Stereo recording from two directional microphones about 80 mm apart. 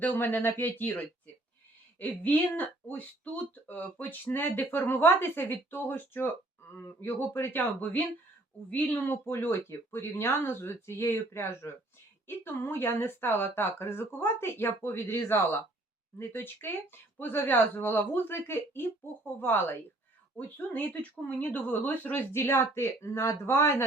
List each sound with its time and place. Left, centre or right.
0.0 s speech: left